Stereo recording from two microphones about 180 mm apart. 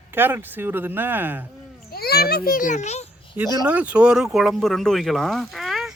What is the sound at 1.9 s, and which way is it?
A child's voice, 60° left (ahead or behind).